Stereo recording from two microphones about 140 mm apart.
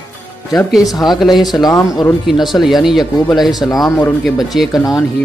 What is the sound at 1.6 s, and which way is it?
Speech, 25° left (ahead or behind).